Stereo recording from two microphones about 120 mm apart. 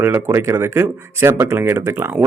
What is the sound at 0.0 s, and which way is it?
Speech, 20° right (ahead or behind).